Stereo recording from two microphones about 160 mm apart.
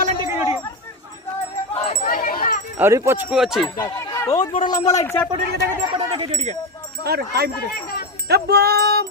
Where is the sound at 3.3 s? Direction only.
5° right (ahead or behind).